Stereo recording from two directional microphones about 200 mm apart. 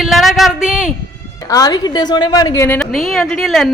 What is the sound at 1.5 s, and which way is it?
A woman's voice, 20° left (ahead or behind).